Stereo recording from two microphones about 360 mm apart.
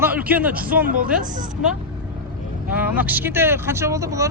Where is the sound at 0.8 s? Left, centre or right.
Right.